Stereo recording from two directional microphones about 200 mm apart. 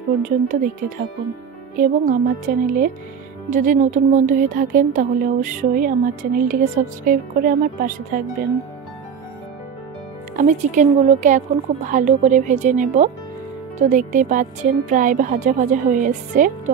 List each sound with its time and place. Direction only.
0.2 s speech: 40° right (ahead or behind)
10.3 s speech: 40° right (ahead or behind)